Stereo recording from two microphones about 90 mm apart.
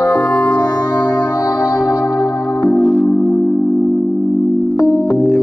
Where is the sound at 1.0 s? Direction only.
25° left (ahead or behind).